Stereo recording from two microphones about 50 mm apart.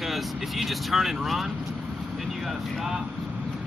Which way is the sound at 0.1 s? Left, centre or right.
Centre.